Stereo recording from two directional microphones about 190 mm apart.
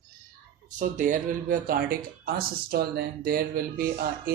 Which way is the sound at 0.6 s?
40° right (ahead or behind).